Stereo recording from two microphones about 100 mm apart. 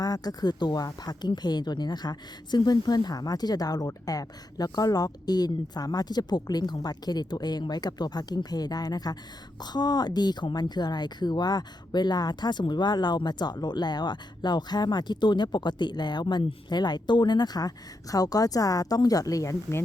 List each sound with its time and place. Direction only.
0.0 s a woman's voice: 40° left (ahead or behind)